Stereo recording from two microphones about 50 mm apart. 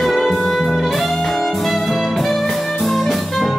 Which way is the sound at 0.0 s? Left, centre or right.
Centre.